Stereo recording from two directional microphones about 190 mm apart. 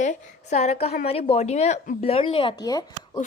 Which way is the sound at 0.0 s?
40° left (ahead or behind).